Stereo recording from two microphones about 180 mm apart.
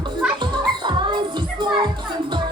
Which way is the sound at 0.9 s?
25° right (ahead or behind).